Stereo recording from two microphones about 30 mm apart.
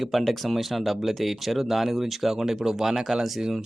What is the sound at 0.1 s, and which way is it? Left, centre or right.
Speech, centre.